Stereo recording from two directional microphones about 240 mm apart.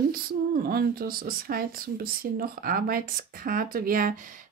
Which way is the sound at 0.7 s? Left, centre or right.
Right.